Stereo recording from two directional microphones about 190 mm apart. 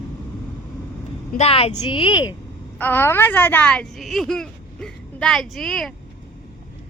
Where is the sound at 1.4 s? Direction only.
30° left (ahead or behind).